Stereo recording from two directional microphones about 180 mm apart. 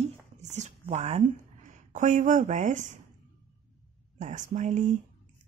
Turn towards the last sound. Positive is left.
turn(degrees=-40)  # may be behind; listen again after turning